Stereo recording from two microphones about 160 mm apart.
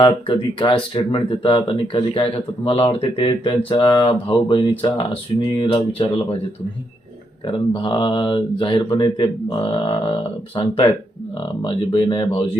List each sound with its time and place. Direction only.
0.0 s speech: 30° left (ahead or behind)
7.4 s speech: 30° left (ahead or behind)